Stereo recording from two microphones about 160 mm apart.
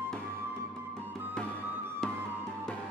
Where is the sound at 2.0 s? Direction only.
5° left (ahead or behind).